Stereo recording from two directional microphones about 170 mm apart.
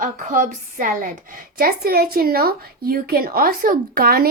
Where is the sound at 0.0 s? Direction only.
50° right (ahead or behind).